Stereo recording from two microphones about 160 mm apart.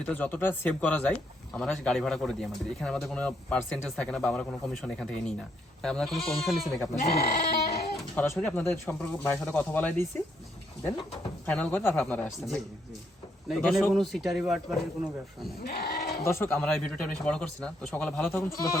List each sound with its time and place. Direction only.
0.1 s a man's voice: 10° left (ahead or behind)
7.0 s speech: 40° left (ahead or behind)
8.1 s speech: 10° left (ahead or behind)
11.4 s a man's voice: 10° left (ahead or behind)
15.6 s sheep: 75° left (ahead or behind)
16.2 s speech: 15° left (ahead or behind)